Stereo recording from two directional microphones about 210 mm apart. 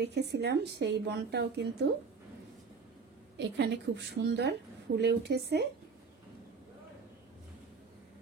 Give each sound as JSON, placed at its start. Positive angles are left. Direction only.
{"t": 0.0, "sound": "a woman's voice", "side_deg": -50}
{"t": 3.3, "sound": "a woman's voice", "side_deg": -55}